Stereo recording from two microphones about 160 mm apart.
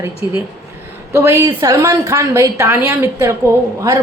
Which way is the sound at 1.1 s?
20° right (ahead or behind).